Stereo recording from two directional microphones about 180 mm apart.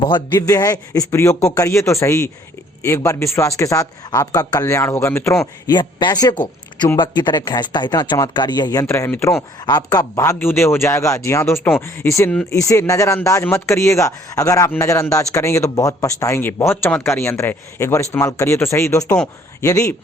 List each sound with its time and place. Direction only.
0.1 s speech: 20° left (ahead or behind)